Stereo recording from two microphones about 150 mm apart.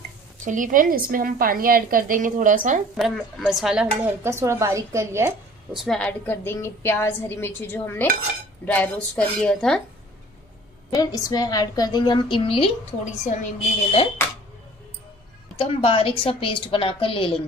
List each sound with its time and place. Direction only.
0.5 s a woman's voice: 60° right (ahead or behind)
3.0 s speech: centre (ahead or behind)
4.2 s a woman's voice: 15° right (ahead or behind)
5.7 s speech: centre (ahead or behind)
6.3 s a woman's voice: 15° left (ahead or behind)
10.9 s a woman's voice: 25° left (ahead or behind)
13.0 s a woman's voice: 55° left (ahead or behind)
15.5 s a woman's voice: 35° left (ahead or behind)